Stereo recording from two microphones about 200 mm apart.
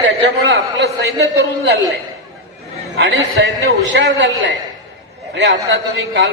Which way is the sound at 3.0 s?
60° right (ahead or behind).